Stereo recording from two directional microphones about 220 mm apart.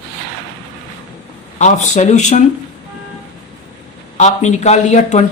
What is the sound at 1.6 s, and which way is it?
Speech, 35° left (ahead or behind).